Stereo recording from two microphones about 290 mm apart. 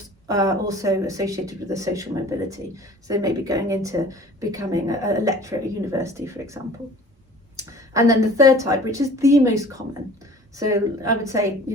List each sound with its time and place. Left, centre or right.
0.3 s speech: centre